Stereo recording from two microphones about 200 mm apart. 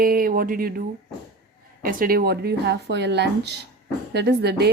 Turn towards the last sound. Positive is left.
turn(degrees=-55)  # may be behind; listen again after turning